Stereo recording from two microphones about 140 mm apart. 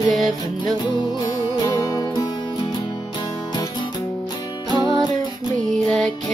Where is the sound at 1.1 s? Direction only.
30° left (ahead or behind).